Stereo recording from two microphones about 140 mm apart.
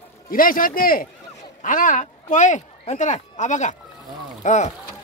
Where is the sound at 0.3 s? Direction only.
90° left.